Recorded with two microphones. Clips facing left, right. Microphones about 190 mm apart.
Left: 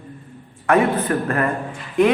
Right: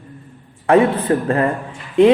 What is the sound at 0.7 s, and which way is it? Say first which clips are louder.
Speech: right 4 dB; 30° right (ahead or behind).